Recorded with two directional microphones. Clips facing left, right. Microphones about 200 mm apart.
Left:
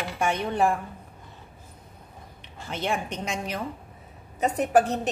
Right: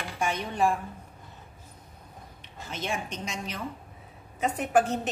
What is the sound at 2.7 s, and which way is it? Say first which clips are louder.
Speech: left 4 dB; 60° left (ahead or behind).